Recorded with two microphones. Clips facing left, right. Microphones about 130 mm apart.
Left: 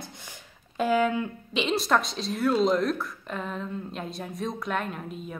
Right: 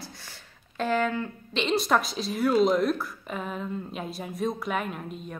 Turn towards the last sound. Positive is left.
turn(degrees=0)  # may be behind; listen again after turning